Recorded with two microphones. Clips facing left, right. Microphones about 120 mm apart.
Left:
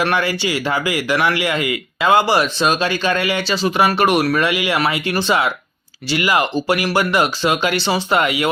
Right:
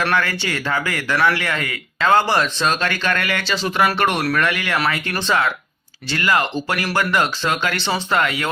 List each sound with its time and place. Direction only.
0.0 s speech: 15° left (ahead or behind)